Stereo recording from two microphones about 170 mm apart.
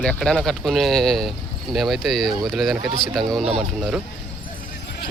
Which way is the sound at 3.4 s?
35° right (ahead or behind).